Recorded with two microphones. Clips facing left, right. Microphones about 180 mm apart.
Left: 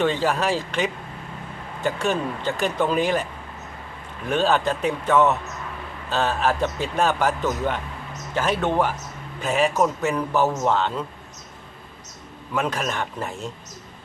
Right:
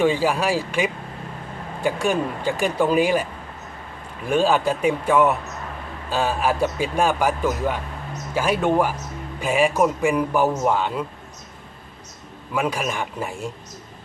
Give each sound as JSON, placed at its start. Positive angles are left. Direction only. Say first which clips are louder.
{"t": 0.0, "sound": "a man's voice", "louder": "right 2 dB", "side_deg": -10}
{"t": 4.3, "sound": "a man's voice", "louder": "right 2 dB", "side_deg": -10}
{"t": 12.5, "sound": "a man's voice", "louder": "right 1 dB", "side_deg": -10}